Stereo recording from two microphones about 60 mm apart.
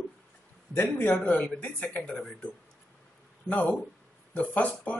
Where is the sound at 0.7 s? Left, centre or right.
Left; by 2.2 s centre.